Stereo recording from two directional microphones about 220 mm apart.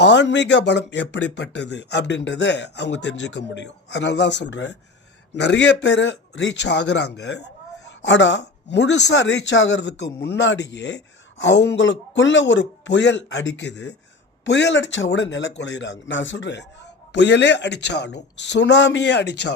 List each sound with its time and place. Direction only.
0.0 s speech: 50° left (ahead or behind)